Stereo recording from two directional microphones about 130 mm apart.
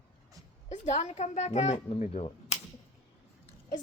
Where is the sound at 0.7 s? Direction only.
65° left (ahead or behind).